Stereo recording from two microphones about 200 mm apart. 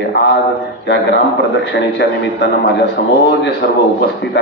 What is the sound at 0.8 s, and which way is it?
A man's voice, 65° left (ahead or behind).